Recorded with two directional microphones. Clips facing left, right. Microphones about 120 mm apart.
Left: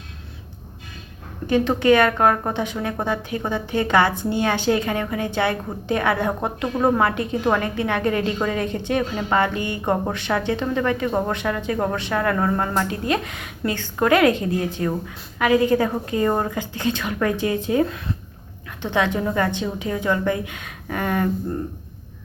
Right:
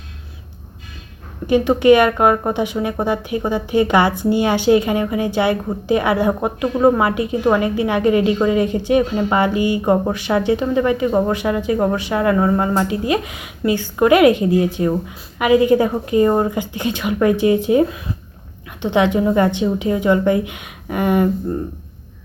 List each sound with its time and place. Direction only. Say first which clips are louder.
1.5 s speech: right 5 dB; 15° right (ahead or behind)